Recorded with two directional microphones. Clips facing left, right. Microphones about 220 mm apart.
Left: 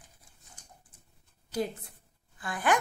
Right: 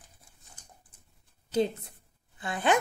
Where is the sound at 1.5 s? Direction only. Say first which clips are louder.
Right 5 dB; 25° right (ahead or behind).